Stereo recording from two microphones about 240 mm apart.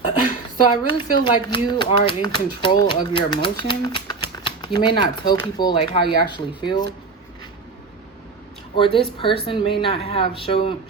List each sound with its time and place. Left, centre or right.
0.5 s speech: centre
8.7 s speech: left